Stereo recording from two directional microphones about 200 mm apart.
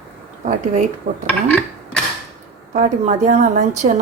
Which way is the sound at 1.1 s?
50° right (ahead or behind).